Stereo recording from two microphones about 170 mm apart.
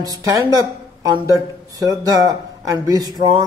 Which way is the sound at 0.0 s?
20° right (ahead or behind).